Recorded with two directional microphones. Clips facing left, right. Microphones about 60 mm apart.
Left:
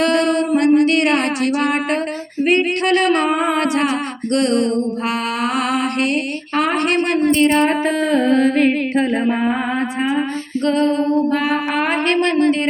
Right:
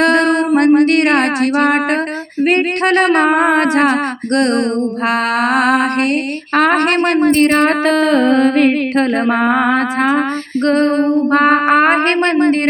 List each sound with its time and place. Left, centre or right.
0.0 s music: right
9.0 s a sound: right
10.7 s music: right